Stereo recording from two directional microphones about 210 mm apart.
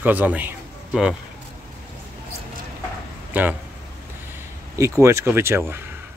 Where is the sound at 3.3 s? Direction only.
10° right (ahead or behind).